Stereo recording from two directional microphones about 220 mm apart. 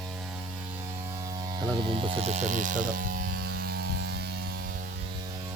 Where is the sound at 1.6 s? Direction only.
20° right (ahead or behind); by 3.9 s 45° right (ahead or behind).